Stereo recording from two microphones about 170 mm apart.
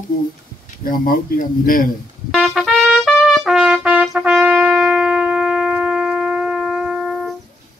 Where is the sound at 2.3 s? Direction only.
Centre (ahead or behind).